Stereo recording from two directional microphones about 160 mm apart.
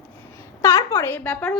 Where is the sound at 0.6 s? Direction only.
20° left (ahead or behind).